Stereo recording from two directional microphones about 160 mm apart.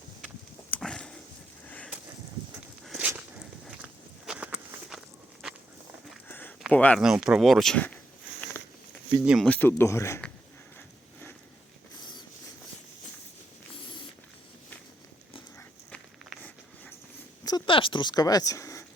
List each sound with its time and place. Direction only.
0.7 s dog: 5° left (ahead or behind)
1.6 s a sound: 10° left (ahead or behind)
2.8 s walk: 5° right (ahead or behind)
4.3 s walk: 5° right (ahead or behind)
6.2 s a sound: 10° left (ahead or behind)
6.7 s speech: 10° left (ahead or behind)
7.0 s speech: 5° right (ahead or behind)
9.2 s speech: 5° right (ahead or behind)
9.5 s speech: 15° left (ahead or behind)
15.9 s walk: 10° left (ahead or behind)
17.4 s a sound: 30° left (ahead or behind)